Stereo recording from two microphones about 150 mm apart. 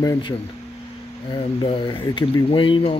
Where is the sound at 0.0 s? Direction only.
25° left (ahead or behind).